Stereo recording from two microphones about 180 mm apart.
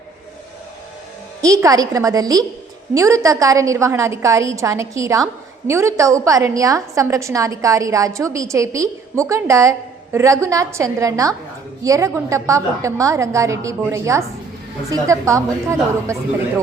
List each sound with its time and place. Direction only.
1.4 s a woman's voice: 20° right (ahead or behind)